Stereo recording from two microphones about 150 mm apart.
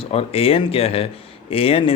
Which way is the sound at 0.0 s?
40° left (ahead or behind).